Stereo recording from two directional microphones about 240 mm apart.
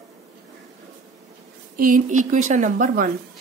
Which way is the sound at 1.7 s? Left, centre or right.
Right.